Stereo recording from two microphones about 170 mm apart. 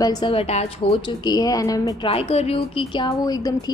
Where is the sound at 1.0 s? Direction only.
25° left (ahead or behind).